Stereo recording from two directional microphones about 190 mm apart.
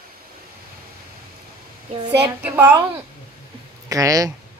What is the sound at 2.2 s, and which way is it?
Speech, 10° right (ahead or behind).